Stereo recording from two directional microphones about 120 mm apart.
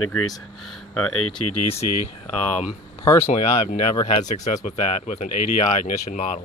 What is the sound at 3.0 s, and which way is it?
Speech, 25° left (ahead or behind).